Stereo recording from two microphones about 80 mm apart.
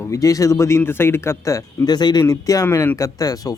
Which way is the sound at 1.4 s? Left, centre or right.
Left.